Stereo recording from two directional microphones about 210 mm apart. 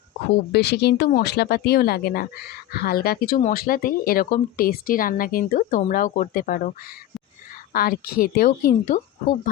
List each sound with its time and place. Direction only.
0.5 s speech: 50° left (ahead or behind)